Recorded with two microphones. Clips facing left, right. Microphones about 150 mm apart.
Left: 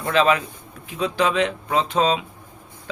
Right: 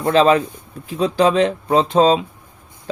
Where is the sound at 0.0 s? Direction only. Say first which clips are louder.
Right 5 dB; 35° right (ahead or behind).